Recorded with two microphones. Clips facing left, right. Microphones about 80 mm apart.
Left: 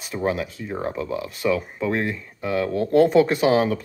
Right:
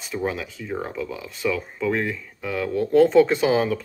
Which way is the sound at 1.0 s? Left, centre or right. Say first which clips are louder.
Left 2 dB; left.